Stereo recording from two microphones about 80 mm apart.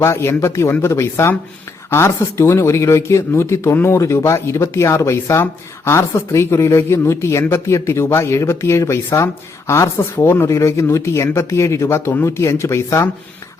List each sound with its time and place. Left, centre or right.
0.0 s speech: left